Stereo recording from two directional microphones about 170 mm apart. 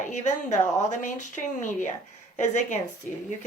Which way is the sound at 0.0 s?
45° left (ahead or behind).